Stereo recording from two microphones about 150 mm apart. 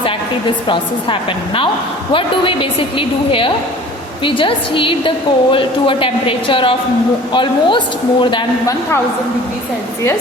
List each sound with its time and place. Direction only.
2.1 s a woman's voice: 35° left (ahead or behind)
4.2 s a woman's voice: 35° left (ahead or behind)